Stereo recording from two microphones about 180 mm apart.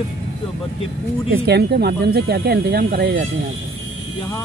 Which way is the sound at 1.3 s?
65° right (ahead or behind).